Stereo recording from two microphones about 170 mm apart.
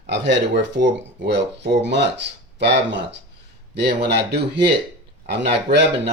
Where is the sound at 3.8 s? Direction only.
80° right.